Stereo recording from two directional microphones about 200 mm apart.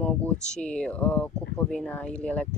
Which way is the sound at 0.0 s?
5° left (ahead or behind).